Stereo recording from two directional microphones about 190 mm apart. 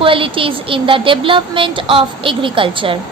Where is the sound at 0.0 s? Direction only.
30° right (ahead or behind).